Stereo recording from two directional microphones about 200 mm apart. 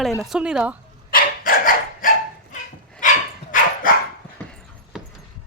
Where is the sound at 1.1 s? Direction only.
45° left (ahead or behind).